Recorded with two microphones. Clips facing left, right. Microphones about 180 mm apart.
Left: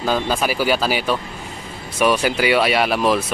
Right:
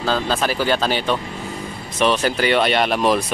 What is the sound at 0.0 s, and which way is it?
A man's voice, 10° left (ahead or behind).